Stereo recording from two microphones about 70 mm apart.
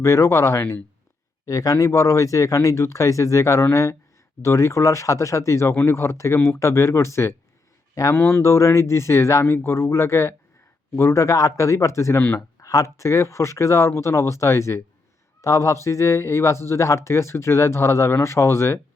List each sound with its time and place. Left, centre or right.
0.0 s speech: left
1.5 s speech: left